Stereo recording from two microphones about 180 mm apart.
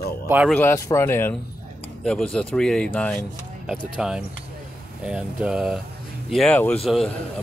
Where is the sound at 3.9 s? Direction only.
5° right (ahead or behind).